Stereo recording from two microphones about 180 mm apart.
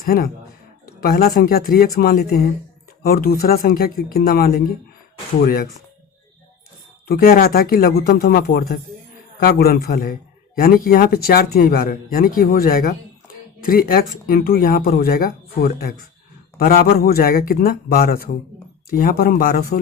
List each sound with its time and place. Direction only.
0.0 s a man's voice: 55° left (ahead or behind)
7.1 s a man's voice: 55° left (ahead or behind)